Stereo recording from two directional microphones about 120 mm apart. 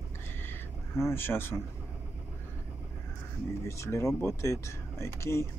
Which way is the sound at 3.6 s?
25° left (ahead or behind).